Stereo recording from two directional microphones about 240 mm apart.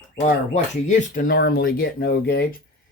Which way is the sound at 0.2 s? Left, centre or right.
Left.